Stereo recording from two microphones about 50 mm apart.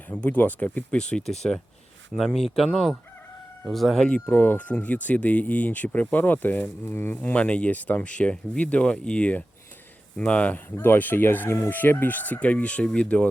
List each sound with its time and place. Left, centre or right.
0.1 s speech: left
0.9 s speech: centre
1.4 s speech: left
2.1 s speech: centre
4.0 s speech: left
4.4 s speech: left
6.8 s speech: left
7.2 s speech: left
10.8 s speech: left